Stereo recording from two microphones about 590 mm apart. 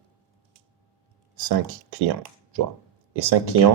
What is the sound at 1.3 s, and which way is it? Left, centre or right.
Speech, right.